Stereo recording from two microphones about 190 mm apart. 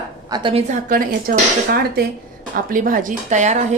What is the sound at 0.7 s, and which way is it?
Speech, 45° right (ahead or behind).